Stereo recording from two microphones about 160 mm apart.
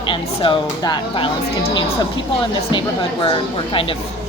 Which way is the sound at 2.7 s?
30° left (ahead or behind).